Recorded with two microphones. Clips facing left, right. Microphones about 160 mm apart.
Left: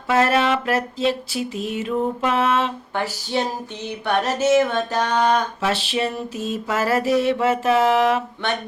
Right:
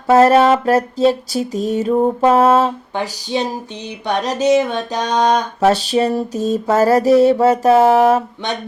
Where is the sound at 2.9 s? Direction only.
15° right (ahead or behind).